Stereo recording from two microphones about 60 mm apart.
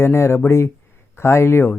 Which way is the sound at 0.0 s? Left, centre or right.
Left.